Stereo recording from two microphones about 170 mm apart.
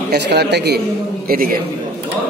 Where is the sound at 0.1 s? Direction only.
80° right.